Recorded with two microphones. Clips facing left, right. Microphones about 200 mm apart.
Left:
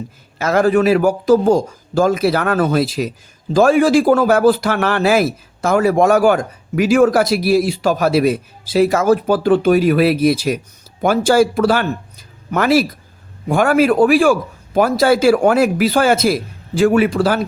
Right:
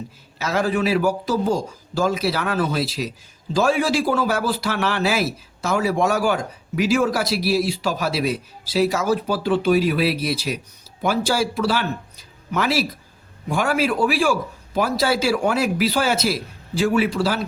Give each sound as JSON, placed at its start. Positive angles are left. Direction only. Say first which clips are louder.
{"t": 0.3, "sound": "a man's voice", "louder": "left 8 dB", "side_deg": 50}